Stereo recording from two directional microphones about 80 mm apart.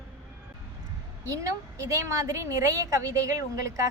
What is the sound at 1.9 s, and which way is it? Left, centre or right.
A woman's voice, right.